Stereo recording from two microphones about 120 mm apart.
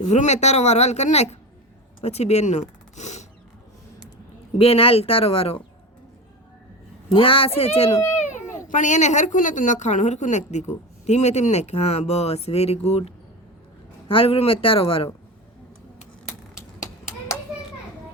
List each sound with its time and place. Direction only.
0.0 s a woman's voice: 75° left (ahead or behind)
4.5 s speech: 55° left (ahead or behind)
7.1 s speech: 50° left (ahead or behind)
8.7 s a woman's voice: 90° left; by 15.1 s 50° left (ahead or behind)